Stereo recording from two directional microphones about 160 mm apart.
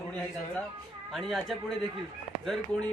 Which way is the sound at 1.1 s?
Centre (ahead or behind).